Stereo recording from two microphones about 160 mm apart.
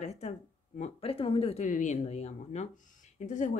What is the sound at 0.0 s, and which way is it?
Speech, 45° left (ahead or behind).